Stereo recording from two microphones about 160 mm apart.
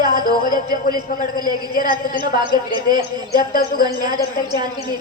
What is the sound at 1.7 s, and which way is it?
Speech, 60° left (ahead or behind).